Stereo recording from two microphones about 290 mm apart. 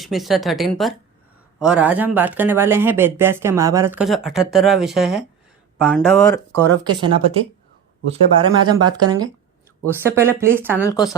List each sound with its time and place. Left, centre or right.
0.0 s speech: centre
7.0 s speech: centre